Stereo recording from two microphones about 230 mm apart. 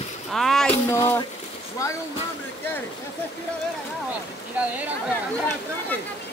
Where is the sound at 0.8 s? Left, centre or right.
Centre.